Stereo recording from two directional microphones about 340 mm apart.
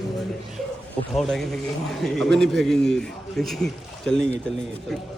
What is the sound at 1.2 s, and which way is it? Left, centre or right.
Speech, centre.